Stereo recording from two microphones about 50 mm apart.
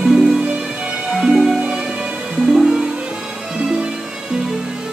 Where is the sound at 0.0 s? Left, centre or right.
Centre.